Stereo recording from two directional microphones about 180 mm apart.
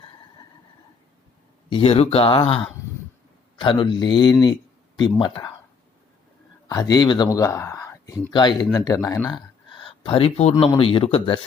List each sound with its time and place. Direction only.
1.7 s speech: 35° left (ahead or behind)
6.7 s speech: 20° left (ahead or behind)
9.7 s a sound: 30° left (ahead or behind)
10.8 s speech: 30° left (ahead or behind)